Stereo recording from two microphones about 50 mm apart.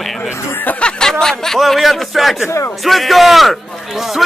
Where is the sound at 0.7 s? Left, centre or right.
Centre.